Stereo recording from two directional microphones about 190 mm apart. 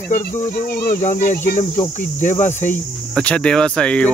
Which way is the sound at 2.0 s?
40° left (ahead or behind).